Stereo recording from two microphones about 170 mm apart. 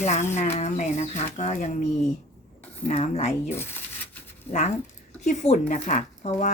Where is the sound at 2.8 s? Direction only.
40° left (ahead or behind).